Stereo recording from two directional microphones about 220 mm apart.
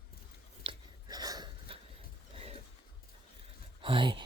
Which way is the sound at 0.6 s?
20° right (ahead or behind).